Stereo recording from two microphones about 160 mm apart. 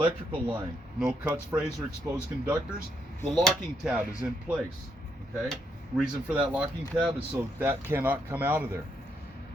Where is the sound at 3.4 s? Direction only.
5° right (ahead or behind).